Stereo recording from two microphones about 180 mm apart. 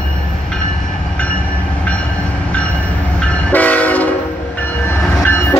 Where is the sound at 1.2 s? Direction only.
5° left (ahead or behind).